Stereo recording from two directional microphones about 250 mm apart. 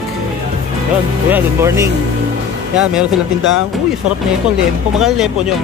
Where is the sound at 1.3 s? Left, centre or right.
Centre.